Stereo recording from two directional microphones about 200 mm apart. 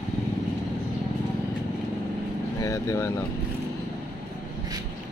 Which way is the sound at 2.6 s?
15° left (ahead or behind).